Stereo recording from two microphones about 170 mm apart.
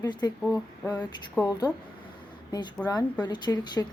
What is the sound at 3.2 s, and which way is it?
Speech, 25° left (ahead or behind).